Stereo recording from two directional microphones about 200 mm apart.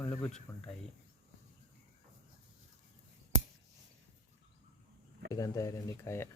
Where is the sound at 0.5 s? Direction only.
10° left (ahead or behind).